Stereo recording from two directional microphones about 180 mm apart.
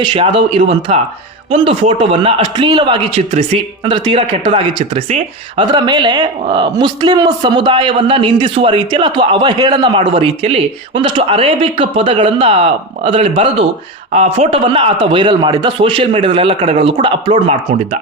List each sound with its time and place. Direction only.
0.0 s a man's voice: 30° right (ahead or behind)